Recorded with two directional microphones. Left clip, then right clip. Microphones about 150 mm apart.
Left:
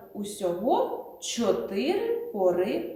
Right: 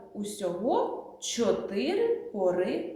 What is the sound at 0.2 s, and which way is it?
A woman's voice, 10° right (ahead or behind).